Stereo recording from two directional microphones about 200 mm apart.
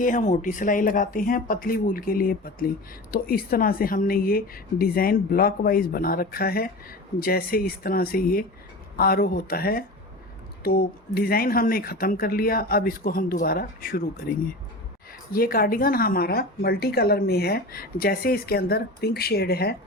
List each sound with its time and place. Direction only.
0.0 s a woman's voice: 40° left (ahead or behind)